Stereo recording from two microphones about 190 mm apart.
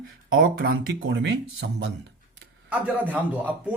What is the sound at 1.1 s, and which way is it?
Speech, 70° right (ahead or behind).